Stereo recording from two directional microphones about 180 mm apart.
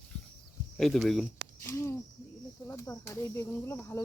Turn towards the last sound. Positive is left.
turn(degrees=15)  # may be behind; listen again after turning